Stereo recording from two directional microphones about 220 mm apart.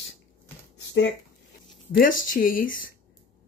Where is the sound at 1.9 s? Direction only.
40° left (ahead or behind).